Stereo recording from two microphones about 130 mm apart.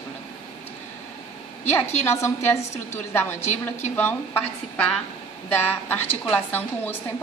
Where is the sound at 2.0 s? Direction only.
20° left (ahead or behind).